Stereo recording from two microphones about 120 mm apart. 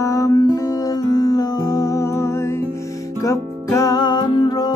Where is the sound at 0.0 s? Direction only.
25° left (ahead or behind).